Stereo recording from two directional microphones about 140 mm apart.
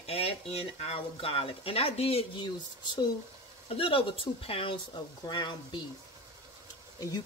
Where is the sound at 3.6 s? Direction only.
40° left (ahead or behind).